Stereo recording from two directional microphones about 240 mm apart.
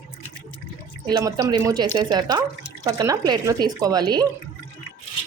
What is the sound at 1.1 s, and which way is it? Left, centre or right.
Speech, centre.